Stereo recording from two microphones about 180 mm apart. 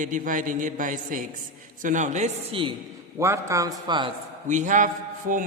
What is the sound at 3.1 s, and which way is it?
Speech, 15° right (ahead or behind).